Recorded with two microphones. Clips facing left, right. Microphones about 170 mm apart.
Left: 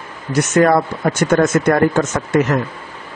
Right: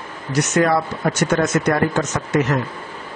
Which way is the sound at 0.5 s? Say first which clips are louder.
Left 5 dB; 50° left (ahead or behind).